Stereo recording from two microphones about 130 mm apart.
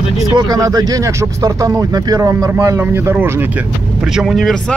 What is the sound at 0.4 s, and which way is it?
Speech, 30° right (ahead or behind).